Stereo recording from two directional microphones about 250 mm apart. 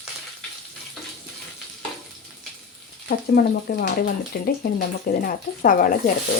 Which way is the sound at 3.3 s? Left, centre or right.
Left.